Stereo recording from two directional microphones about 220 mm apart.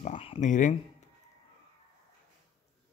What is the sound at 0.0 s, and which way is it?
Speech, 30° left (ahead or behind).